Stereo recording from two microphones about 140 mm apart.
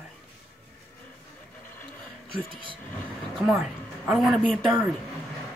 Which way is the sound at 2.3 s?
40° right (ahead or behind).